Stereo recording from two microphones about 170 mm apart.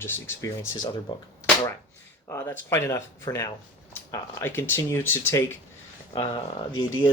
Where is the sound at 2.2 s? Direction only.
15° left (ahead or behind).